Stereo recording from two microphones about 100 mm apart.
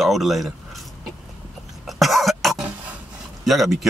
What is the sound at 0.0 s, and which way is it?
Speech, centre (ahead or behind).